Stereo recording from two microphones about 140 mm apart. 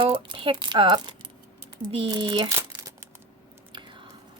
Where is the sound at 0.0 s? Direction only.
40° right (ahead or behind).